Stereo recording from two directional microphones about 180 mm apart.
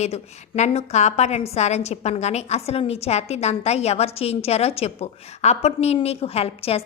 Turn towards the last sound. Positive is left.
turn(degrees=35)  # may be behind; listen again after turning